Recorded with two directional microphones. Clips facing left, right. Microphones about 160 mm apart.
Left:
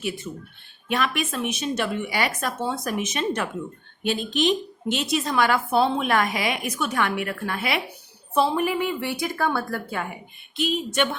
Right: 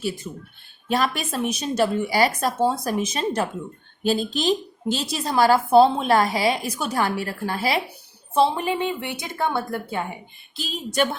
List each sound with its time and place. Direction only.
0.9 s a woman's voice: 35° right (ahead or behind)
10.6 s a woman's voice: 35° right (ahead or behind)